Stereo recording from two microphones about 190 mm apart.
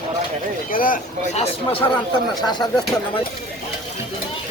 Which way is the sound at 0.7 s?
45° left (ahead or behind).